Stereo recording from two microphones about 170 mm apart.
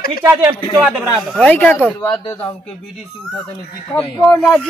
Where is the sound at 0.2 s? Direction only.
15° right (ahead or behind).